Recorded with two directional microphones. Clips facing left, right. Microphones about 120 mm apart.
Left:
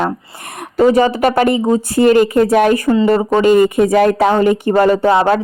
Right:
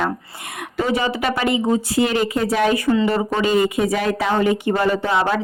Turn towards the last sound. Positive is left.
turn(degrees=40)  # may be behind; listen again after turning